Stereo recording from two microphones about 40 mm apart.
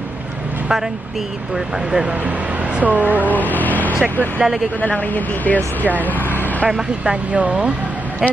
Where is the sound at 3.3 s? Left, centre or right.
Left.